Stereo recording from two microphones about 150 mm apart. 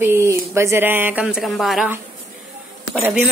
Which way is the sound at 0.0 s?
15° right (ahead or behind).